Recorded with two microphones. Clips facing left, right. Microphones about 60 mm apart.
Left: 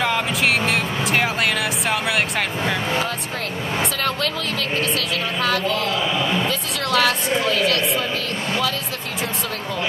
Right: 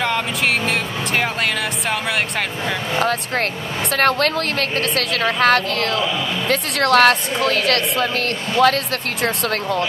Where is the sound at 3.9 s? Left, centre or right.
Right.